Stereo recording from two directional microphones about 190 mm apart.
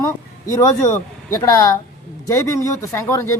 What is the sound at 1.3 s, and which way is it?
Speech, 15° left (ahead or behind).